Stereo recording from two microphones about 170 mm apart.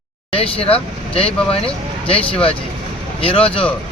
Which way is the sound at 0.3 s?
35° left (ahead or behind).